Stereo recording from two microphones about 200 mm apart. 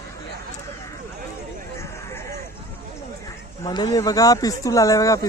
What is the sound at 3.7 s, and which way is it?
Speech, 20° left (ahead or behind).